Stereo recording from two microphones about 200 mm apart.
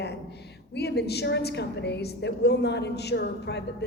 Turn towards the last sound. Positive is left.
turn(degrees=60)  # may be behind; listen again after turning